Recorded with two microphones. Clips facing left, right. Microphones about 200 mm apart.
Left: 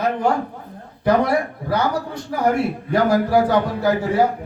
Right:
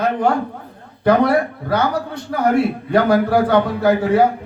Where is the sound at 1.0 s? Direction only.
60° right (ahead or behind).